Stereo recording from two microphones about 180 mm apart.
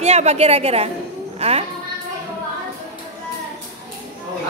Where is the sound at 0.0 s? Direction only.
35° right (ahead or behind).